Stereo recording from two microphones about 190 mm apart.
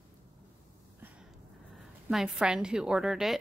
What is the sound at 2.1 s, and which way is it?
A woman's voice, centre (ahead or behind).